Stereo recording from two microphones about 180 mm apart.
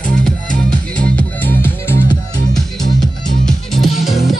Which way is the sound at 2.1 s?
20° left (ahead or behind).